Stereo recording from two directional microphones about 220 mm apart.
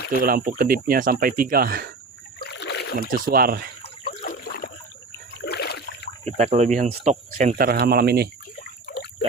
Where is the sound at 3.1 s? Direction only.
40° right (ahead or behind).